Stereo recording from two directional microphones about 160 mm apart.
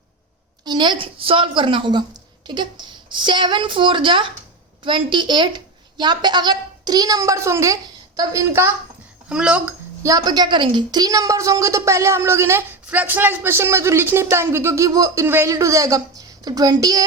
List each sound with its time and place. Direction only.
0.6 s a woman's voice: 25° right (ahead or behind)
9.3 s speech: 5° right (ahead or behind)
10.0 s a woman's voice: 20° right (ahead or behind)